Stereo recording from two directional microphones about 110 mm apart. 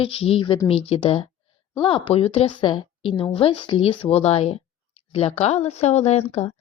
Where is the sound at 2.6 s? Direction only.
45° left (ahead or behind).